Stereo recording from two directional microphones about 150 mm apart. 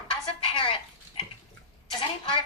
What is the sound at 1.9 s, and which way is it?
Speech, 35° left (ahead or behind).